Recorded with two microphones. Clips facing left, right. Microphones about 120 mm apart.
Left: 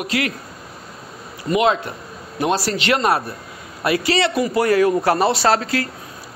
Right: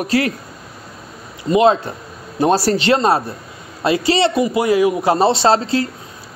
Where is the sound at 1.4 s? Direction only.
30° right (ahead or behind).